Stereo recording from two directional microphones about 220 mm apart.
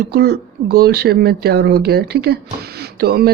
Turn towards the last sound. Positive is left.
turn(degrees=-45)  # may be behind; listen again after turning